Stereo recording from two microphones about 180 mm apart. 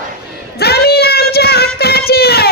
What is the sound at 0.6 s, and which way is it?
Child singing, 60° left (ahead or behind).